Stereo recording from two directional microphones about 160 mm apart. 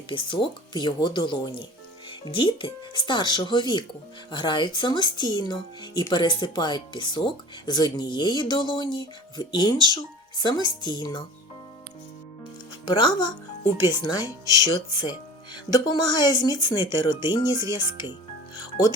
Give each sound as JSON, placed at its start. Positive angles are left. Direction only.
{"t": 0.1, "sound": "speech", "side_deg": 30}
{"t": 12.8, "sound": "speech", "side_deg": 25}
{"t": 18.5, "sound": "music", "side_deg": 25}